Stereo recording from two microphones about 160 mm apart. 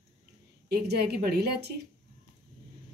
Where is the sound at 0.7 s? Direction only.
90° right.